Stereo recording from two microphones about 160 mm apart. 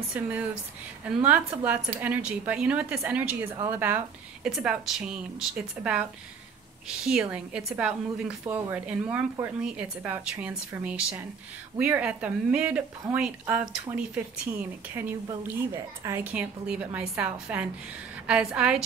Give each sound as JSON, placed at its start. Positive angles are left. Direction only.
{"t": 0.1, "sound": "a woman's voice", "side_deg": -5}
{"t": 7.0, "sound": "a woman's voice", "side_deg": -5}
{"t": 15.4, "sound": "a woman's voice", "side_deg": -20}
{"t": 16.3, "sound": "a woman's voice", "side_deg": -10}